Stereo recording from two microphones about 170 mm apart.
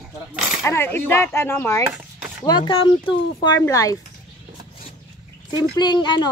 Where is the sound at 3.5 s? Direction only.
20° left (ahead or behind).